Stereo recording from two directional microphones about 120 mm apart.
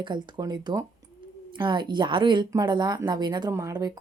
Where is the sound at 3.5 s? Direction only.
25° right (ahead or behind).